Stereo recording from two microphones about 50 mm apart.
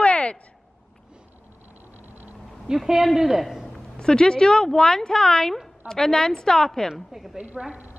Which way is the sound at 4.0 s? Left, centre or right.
Centre.